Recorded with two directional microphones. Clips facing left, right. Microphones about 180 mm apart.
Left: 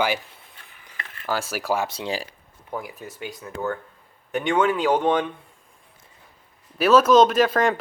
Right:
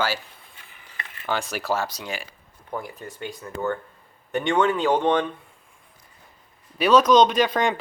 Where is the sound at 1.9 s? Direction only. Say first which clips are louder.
Left 5 dB; 30° left (ahead or behind).